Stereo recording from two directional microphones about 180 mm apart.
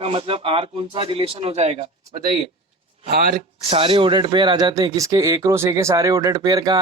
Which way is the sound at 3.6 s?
30° right (ahead or behind).